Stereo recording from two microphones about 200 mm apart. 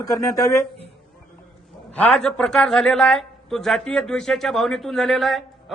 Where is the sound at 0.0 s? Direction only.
15° left (ahead or behind).